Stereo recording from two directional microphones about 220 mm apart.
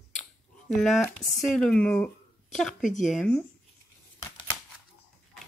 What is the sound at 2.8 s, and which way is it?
Speech, 35° left (ahead or behind).